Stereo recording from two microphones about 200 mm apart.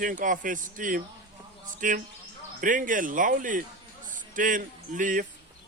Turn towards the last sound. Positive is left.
turn(degrees=-40)  # may be behind; listen again after turning